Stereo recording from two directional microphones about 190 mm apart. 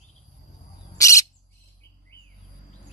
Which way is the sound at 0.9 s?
15° left (ahead or behind).